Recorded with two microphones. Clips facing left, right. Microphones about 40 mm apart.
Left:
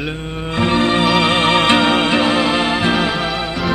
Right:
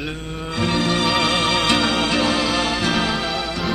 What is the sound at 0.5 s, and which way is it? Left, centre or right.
Music, left.